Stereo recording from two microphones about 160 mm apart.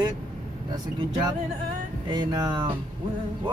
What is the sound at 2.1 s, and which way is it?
Music, 25° right (ahead or behind).